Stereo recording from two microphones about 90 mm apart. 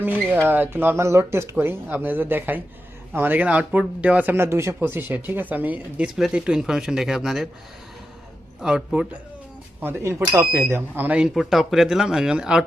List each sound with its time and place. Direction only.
0.0 s speech: 20° right (ahead or behind)
4.4 s speech: 30° right (ahead or behind)
6.1 s speech: 5° right (ahead or behind)
8.6 s speech: 10° right (ahead or behind)
9.8 s speech: 25° right (ahead or behind)
11.3 s speech: centre (ahead or behind)